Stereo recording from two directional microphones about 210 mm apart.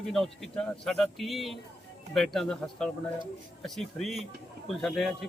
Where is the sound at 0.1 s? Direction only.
Centre (ahead or behind).